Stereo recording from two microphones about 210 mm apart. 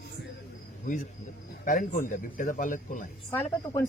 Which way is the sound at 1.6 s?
40° left (ahead or behind).